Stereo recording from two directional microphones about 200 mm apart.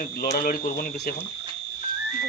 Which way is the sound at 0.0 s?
45° left (ahead or behind).